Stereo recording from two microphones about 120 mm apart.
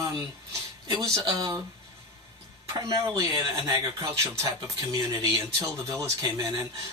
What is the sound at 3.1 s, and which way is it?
Speech, 30° right (ahead or behind).